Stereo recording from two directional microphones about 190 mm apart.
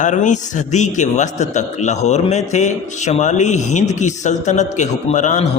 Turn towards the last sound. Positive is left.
turn(degrees=40)  # may be behind; listen again after turning